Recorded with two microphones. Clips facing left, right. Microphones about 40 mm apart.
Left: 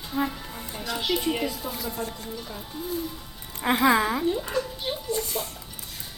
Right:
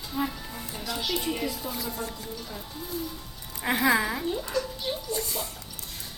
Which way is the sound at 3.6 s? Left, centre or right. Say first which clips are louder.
Left 3 dB; centre.